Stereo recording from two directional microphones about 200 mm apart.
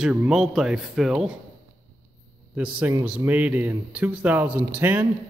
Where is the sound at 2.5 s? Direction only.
5° right (ahead or behind).